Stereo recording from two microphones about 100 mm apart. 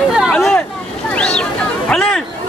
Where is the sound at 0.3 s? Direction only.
5° left (ahead or behind).